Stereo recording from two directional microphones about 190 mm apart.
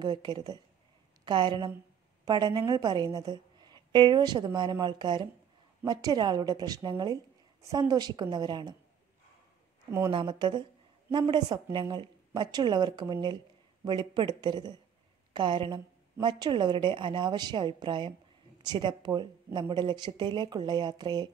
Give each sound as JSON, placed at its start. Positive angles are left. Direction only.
{"t": 0.0, "sound": "a woman's voice", "side_deg": -25}
{"t": 9.8, "sound": "speech", "side_deg": -15}
{"t": 10.1, "sound": "a woman's voice", "side_deg": -25}